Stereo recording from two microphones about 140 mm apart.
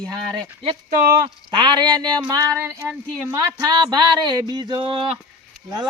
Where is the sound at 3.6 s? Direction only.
30° right (ahead or behind).